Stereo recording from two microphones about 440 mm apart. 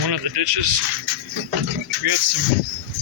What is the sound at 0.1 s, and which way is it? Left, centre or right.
Speech, right.